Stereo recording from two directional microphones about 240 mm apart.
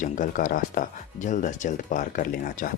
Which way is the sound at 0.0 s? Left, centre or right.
Left.